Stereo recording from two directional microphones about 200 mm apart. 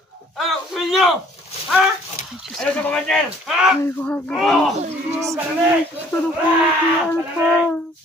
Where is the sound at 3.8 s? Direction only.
10° left (ahead or behind).